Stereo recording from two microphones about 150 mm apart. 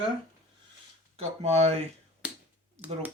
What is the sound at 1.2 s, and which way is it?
Speech, 45° right (ahead or behind).